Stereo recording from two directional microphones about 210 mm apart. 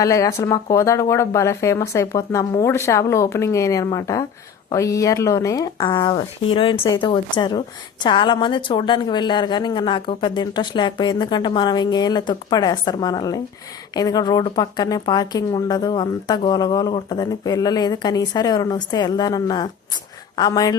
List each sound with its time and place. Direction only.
0.0 s speech: 15° left (ahead or behind)